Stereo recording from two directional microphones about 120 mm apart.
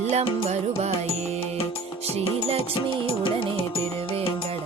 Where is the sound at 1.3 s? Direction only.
50° left (ahead or behind).